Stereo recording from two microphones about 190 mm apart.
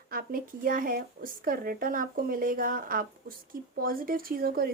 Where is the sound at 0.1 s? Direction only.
50° right (ahead or behind).